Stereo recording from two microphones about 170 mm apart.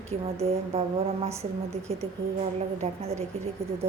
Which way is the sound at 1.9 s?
35° right (ahead or behind).